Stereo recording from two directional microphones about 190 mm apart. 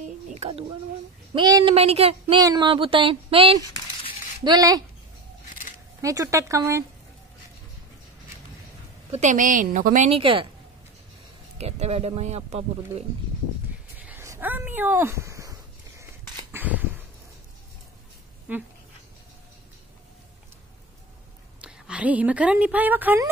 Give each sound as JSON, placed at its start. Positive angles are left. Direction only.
{"t": 0.3, "sound": "speech", "side_deg": -35}
{"t": 5.9, "sound": "speech", "side_deg": -15}
{"t": 9.1, "sound": "a woman's voice", "side_deg": -40}
{"t": 11.5, "sound": "a woman's voice", "side_deg": -35}
{"t": 13.9, "sound": "a sound", "side_deg": -10}
{"t": 16.5, "sound": "a sound", "side_deg": -10}
{"t": 18.5, "sound": "speech", "side_deg": -10}
{"t": 21.5, "sound": "a woman's voice", "side_deg": -5}